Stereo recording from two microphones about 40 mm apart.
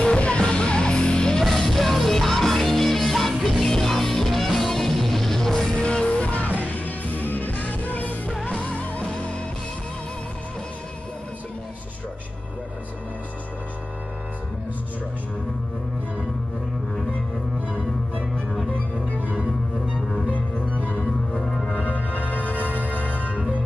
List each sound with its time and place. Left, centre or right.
0.0 s music: left
1.4 s music: centre
5.8 s music: left
6.6 s music: left
8.5 s music: left
18.7 s music: left
20.8 s music: left
21.3 s music: centre
21.7 s music: left